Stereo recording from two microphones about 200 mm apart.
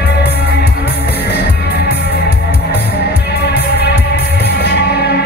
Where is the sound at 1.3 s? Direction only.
55° left (ahead or behind).